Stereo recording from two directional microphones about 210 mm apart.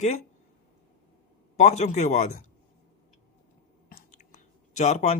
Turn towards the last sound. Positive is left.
turn(degrees=30)  # may be behind; listen again after turning